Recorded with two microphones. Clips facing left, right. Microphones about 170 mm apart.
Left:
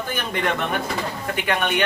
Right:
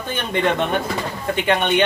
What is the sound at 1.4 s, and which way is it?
Speech, 25° right (ahead or behind).